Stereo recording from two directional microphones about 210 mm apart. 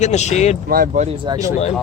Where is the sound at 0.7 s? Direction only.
45° right (ahead or behind).